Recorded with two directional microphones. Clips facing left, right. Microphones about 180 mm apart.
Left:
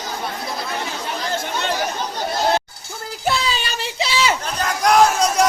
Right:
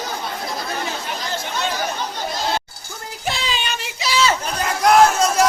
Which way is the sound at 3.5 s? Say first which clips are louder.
Left 1 dB; 35° left (ahead or behind).